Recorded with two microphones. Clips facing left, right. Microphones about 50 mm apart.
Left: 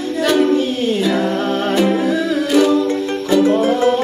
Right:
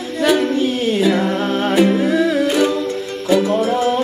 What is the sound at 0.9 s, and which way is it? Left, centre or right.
Music, centre.